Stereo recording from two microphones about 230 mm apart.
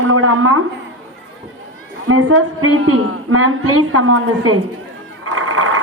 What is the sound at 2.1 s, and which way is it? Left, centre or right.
A woman's voice, right.